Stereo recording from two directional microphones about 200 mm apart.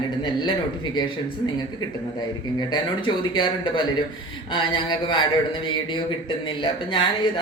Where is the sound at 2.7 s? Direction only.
25° left (ahead or behind).